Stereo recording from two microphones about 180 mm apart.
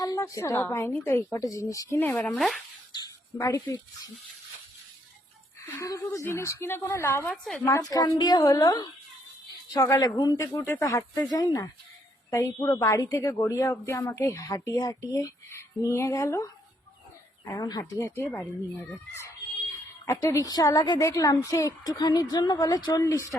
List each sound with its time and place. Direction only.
0.0 s a woman's voice: 20° left (ahead or behind)
2.9 s a sound: 25° left (ahead or behind)
3.4 s speech: 20° left (ahead or behind)
5.8 s a woman's voice: 15° left (ahead or behind)
23.3 s a woman's voice: 5° left (ahead or behind)